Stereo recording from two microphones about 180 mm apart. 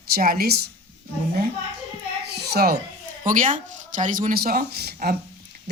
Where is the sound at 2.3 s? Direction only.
60° right (ahead or behind).